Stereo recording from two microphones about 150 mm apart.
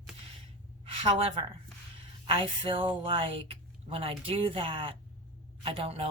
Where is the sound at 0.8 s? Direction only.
40° right (ahead or behind).